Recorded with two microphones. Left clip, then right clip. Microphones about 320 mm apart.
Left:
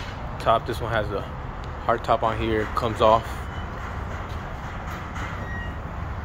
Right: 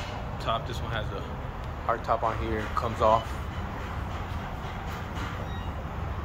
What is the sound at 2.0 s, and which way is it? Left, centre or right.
Speech, left.